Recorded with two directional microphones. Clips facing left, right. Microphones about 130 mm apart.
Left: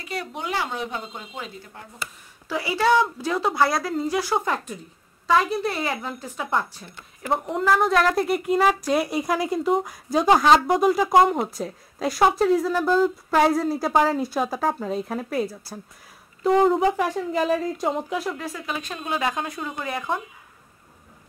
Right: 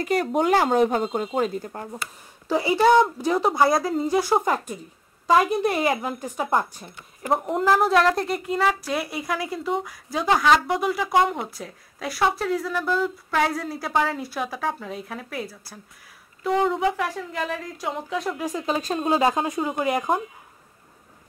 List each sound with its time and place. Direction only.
0.0 s speech: 45° right (ahead or behind)
2.4 s speech: 20° right (ahead or behind)
5.4 s speech: 15° right (ahead or behind)
6.3 s speech: 35° right (ahead or behind)
7.2 s a woman's voice: 5° right (ahead or behind)
8.5 s speech: 15° left (ahead or behind)
12.7 s speech: 35° left (ahead or behind)
13.4 s speech: 25° left (ahead or behind)
14.5 s speech: 35° left (ahead or behind)
16.4 s speech: 35° left (ahead or behind)
18.1 s a woman's voice: centre (ahead or behind)
18.4 s speech: 20° right (ahead or behind)
18.7 s speech: 35° right (ahead or behind)